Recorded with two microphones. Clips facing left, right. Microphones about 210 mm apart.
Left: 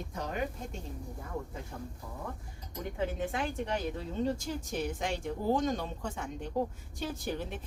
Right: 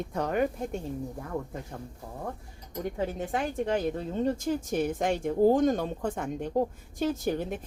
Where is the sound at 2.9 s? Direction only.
45° right (ahead or behind).